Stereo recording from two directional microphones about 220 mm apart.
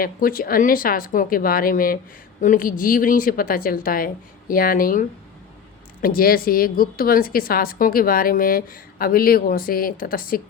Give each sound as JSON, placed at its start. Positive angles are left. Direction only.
{"t": 0.0, "sound": "a woman's voice", "side_deg": 40}